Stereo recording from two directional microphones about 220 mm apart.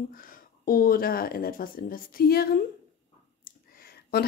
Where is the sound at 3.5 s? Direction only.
45° left (ahead or behind).